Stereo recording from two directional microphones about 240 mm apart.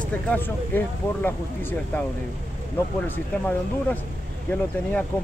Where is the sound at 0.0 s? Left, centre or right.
Centre.